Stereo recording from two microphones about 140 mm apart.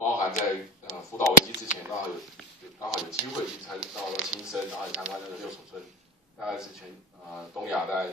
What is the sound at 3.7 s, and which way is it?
Speech, 5° right (ahead or behind).